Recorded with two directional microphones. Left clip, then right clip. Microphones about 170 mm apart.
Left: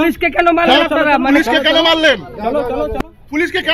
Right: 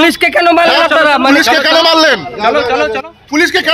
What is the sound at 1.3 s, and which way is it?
A man's voice, 55° right (ahead or behind).